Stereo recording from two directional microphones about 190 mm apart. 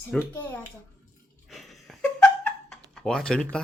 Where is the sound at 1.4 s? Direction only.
Centre (ahead or behind).